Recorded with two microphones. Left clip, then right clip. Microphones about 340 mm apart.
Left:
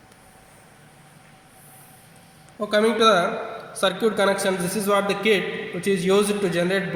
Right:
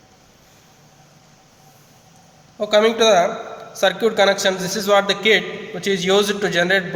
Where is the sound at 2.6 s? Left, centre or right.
Right.